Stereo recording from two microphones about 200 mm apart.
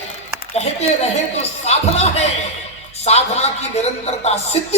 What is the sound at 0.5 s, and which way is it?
A woman's voice, 30° left (ahead or behind).